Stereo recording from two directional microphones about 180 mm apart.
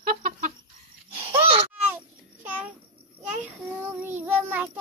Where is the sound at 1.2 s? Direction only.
30° right (ahead or behind).